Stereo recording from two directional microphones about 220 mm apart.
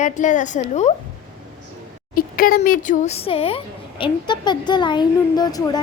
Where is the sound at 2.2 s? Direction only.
40° left (ahead or behind).